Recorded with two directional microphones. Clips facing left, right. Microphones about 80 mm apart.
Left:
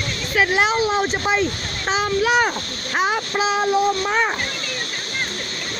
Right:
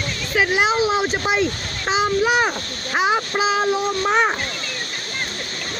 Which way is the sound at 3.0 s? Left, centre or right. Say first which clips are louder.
Right 1 dB; centre.